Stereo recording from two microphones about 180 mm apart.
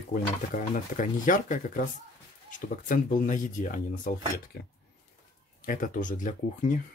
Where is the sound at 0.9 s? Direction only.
45° left (ahead or behind).